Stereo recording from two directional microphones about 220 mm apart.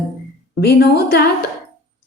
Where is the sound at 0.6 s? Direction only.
45° left (ahead or behind).